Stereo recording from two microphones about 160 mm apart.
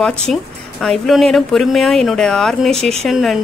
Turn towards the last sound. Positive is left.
turn(degrees=0)  # may be behind; listen again after turning